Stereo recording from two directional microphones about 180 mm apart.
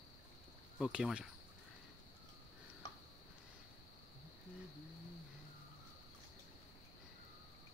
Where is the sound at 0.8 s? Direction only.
5° right (ahead or behind).